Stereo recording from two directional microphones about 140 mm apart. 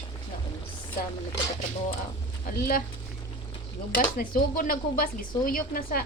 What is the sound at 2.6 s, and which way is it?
Speech, 90° left.